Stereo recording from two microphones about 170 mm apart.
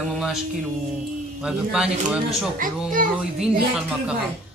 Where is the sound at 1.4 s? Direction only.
5° right (ahead or behind).